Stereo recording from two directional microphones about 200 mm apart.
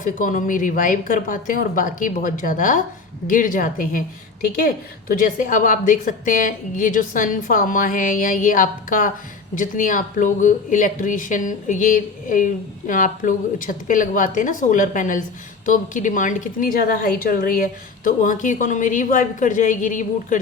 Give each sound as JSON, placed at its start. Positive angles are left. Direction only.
{"t": 0.0, "sound": "a woman's voice", "side_deg": 40}